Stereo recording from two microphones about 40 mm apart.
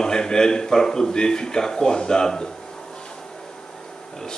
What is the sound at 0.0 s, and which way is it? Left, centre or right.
A man's voice, centre.